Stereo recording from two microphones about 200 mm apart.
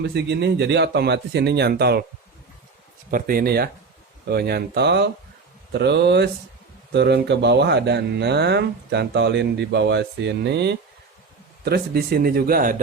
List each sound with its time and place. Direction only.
0.0 s speech: 55° right (ahead or behind)
3.1 s speech: 45° right (ahead or behind)